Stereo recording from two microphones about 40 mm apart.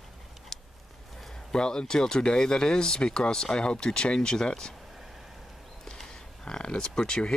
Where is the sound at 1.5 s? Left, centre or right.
Centre.